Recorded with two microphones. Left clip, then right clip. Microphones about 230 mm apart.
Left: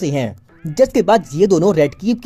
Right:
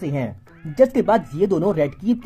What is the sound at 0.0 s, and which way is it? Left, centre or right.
Speech, left.